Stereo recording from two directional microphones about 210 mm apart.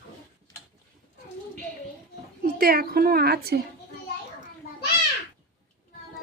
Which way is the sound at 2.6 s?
45° right (ahead or behind).